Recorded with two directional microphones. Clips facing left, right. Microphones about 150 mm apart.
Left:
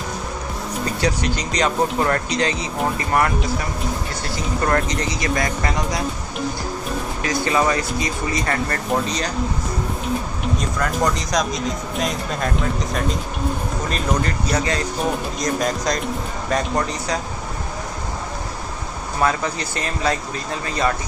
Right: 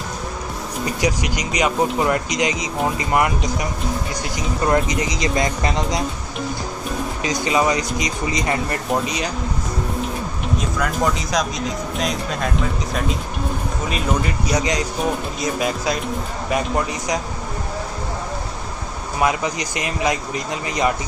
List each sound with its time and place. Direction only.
0.8 s speech: 10° right (ahead or behind)
4.6 s speech: 10° right (ahead or behind)
7.2 s speech: 20° right (ahead or behind)
10.4 s speech: centre (ahead or behind)
19.1 s speech: 15° right (ahead or behind)